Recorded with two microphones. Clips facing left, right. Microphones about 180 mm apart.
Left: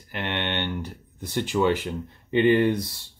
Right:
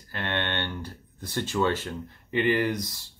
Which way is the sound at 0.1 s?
15° left (ahead or behind).